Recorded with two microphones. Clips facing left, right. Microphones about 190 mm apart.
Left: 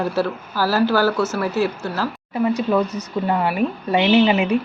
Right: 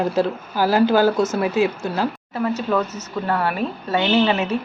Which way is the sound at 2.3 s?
15° left (ahead or behind).